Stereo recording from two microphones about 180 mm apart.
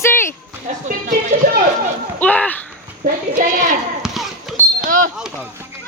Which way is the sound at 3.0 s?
50° right (ahead or behind).